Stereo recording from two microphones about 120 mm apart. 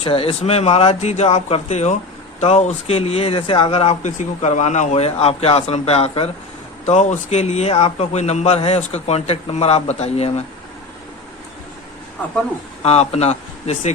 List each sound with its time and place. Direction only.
0.0 s speech: 50° left (ahead or behind)
6.8 s speech: 70° left (ahead or behind)
12.8 s speech: 60° left (ahead or behind)